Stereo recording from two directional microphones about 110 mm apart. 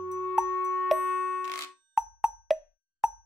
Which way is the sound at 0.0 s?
15° left (ahead or behind).